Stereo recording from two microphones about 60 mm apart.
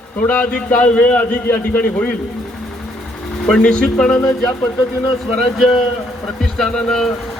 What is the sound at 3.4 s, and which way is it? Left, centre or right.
Speech, centre.